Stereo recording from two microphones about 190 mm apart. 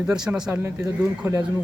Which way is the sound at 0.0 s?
5° right (ahead or behind).